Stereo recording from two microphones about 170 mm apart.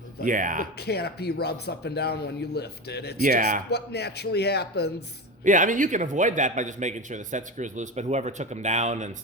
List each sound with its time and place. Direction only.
0.3 s a man's voice: 50° right (ahead or behind)
0.8 s speech: 70° left (ahead or behind)
3.2 s a man's voice: 50° right (ahead or behind)
3.7 s speech: 75° left (ahead or behind)
5.5 s a man's voice: 50° right (ahead or behind)